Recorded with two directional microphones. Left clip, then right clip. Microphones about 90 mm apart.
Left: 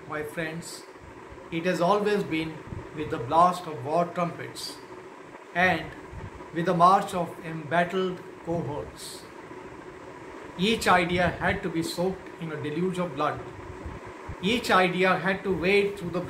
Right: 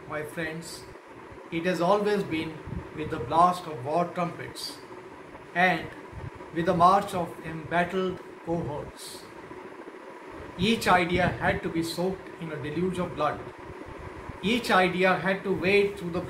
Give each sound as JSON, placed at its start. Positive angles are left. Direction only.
{"t": 0.1, "sound": "speech", "side_deg": 30}
{"t": 1.5, "sound": "speech", "side_deg": 30}
{"t": 5.5, "sound": "speech", "side_deg": 30}
{"t": 10.6, "sound": "speech", "side_deg": 30}
{"t": 14.4, "sound": "speech", "side_deg": 30}